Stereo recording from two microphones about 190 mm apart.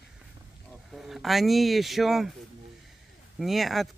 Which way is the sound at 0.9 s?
Centre (ahead or behind).